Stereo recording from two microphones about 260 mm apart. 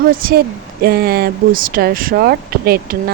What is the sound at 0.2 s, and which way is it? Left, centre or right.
Speech, right.